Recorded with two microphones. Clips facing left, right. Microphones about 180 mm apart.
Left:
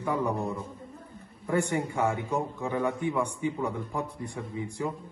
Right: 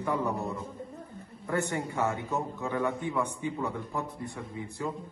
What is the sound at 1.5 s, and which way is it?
A man's voice, 15° left (ahead or behind).